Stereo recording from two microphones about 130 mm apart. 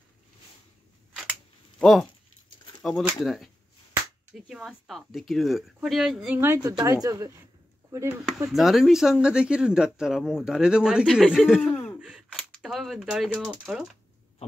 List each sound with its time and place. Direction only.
1.8 s speech: centre (ahead or behind)
4.5 s speech: centre (ahead or behind)
6.4 s speech: 20° right (ahead or behind)
8.5 s speech: centre (ahead or behind)
11.7 s a sound: 15° left (ahead or behind)
12.3 s speech: centre (ahead or behind)